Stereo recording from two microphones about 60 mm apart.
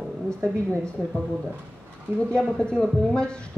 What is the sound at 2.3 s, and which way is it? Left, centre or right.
A woman's voice, centre.